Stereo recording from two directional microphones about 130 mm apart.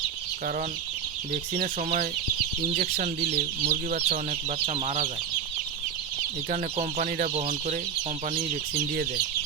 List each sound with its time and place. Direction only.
1.6 s speech: 90° right
3.2 s speech: 55° right (ahead or behind)
6.5 s speech: 70° right (ahead or behind)